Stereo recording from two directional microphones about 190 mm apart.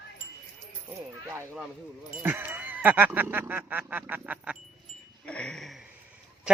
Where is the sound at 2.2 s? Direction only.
10° right (ahead or behind).